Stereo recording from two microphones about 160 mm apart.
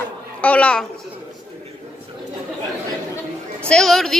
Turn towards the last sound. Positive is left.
turn(degrees=0)  # may be behind; listen again after turning